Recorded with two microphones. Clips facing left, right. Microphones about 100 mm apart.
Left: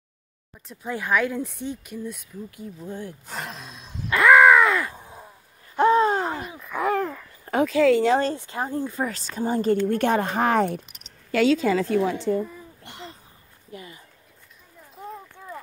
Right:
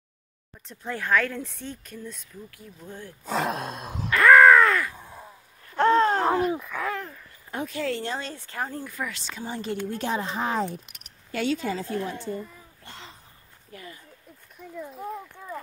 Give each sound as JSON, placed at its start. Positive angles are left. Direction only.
{"t": 0.7, "sound": "speech", "side_deg": 10}
{"t": 2.6, "sound": "speech", "side_deg": 25}
{"t": 3.3, "sound": "a sound", "side_deg": -90}
{"t": 3.6, "sound": "gasp", "side_deg": -55}
{"t": 4.1, "sound": "crow", "side_deg": 15}
{"t": 4.8, "sound": "caw", "side_deg": 20}
{"t": 5.8, "sound": "groan", "side_deg": 10}
{"t": 6.7, "sound": "a sound", "side_deg": 20}
{"t": 7.1, "sound": "a sound", "side_deg": 90}
{"t": 8.4, "sound": "speech", "side_deg": 20}
{"t": 9.8, "sound": "speech", "side_deg": 60}
{"t": 11.3, "sound": "a woman's voice", "side_deg": 90}
{"t": 13.7, "sound": "speech", "side_deg": 20}
{"t": 15.0, "sound": "clip-clop", "side_deg": -5}